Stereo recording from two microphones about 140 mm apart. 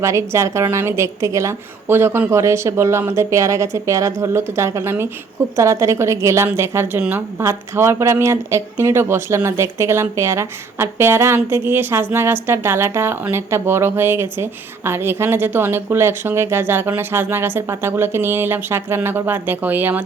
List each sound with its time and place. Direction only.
0.0 s a woman's voice: 20° right (ahead or behind)